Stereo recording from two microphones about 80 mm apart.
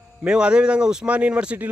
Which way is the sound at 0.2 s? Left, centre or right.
Centre.